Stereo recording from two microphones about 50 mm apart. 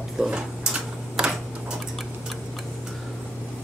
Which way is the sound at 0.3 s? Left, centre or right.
Centre.